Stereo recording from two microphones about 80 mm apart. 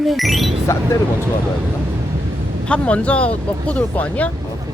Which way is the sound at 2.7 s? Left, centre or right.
Centre.